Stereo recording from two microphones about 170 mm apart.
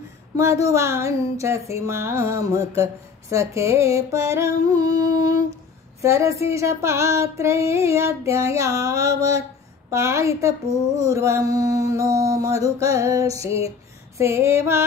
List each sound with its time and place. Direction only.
0.4 s speech: 15° right (ahead or behind)
11.0 s mantra: 20° right (ahead or behind)
14.1 s speech: 15° right (ahead or behind)